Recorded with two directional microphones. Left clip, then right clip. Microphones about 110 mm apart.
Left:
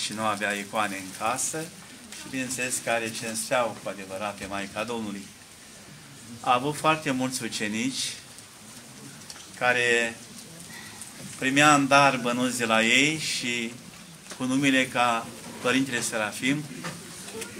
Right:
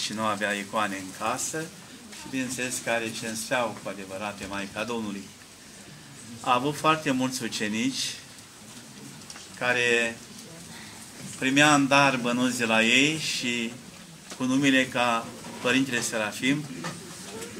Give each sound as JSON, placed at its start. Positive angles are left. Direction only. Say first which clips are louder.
{"t": 0.0, "sound": "a man's voice", "louder": "even", "side_deg": 0}
{"t": 6.4, "sound": "a man's voice", "louder": "even", "side_deg": 0}
{"t": 9.6, "sound": "a man's voice", "louder": "left 1 dB", "side_deg": 5}
{"t": 11.3, "sound": "a man's voice", "louder": "left 1 dB", "side_deg": 5}